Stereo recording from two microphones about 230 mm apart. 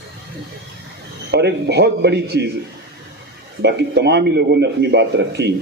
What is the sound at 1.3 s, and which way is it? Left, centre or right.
A man's voice, right.